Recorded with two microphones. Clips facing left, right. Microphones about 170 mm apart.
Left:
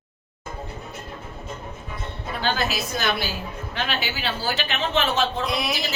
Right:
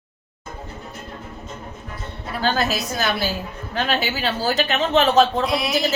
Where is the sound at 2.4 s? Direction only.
40° right (ahead or behind).